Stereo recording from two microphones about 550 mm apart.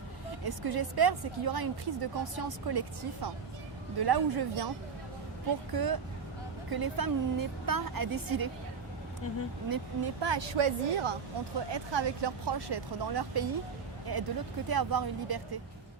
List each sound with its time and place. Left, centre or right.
0.4 s a woman's voice: right
5.7 s a woman's voice: right
9.6 s speech: right
11.7 s a woman's voice: right